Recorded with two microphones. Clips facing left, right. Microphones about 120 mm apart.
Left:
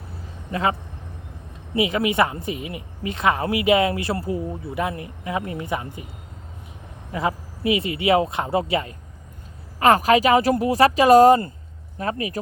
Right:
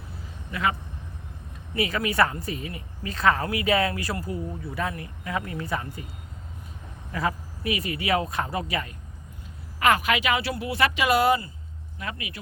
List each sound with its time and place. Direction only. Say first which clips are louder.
0.5 s speech: left 4 dB; 30° left (ahead or behind)
1.7 s a woman's voice: left 5 dB; 20° left (ahead or behind)
7.1 s a woman's voice: left 3 dB; 20° left (ahead or behind)